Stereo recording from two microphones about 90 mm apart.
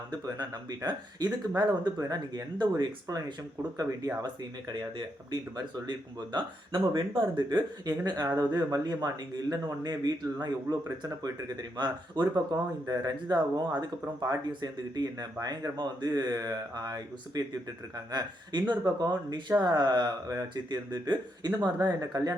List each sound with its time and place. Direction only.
0.1 s speech: 50° right (ahead or behind)
4.7 s speech: 55° right (ahead or behind); by 7.0 s 70° right (ahead or behind)
7.2 s speech: 55° right (ahead or behind)